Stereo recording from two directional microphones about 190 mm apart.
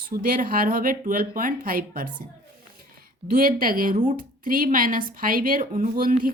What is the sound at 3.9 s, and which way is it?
Speech, 30° right (ahead or behind).